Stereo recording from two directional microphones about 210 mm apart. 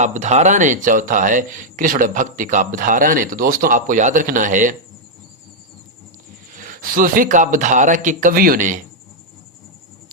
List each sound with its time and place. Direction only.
0.0 s speech: 35° right (ahead or behind)
6.5 s speech: 40° right (ahead or behind)